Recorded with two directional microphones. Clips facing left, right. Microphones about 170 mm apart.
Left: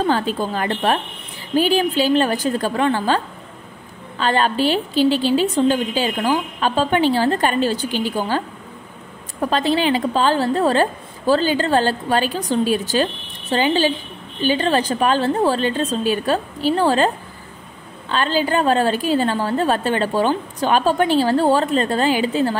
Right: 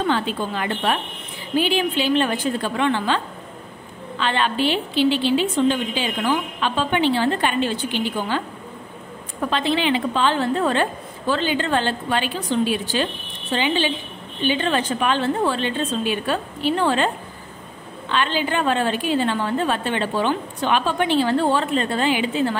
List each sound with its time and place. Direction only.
0.0 s a woman's voice: 40° left (ahead or behind)
4.2 s a woman's voice: 40° left (ahead or behind)
9.4 s a woman's voice: 40° left (ahead or behind)